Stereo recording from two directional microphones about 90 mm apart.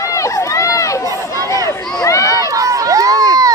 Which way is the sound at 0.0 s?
35° left (ahead or behind).